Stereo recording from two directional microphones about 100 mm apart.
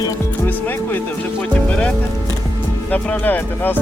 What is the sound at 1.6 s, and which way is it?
Speech, 10° left (ahead or behind).